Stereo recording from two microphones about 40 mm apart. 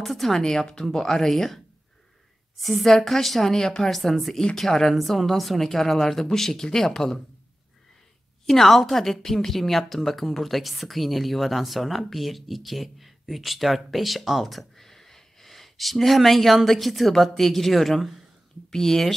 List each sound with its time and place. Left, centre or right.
0.0 s speech: centre
0.4 s speech: centre
2.6 s speech: centre
8.5 s speech: centre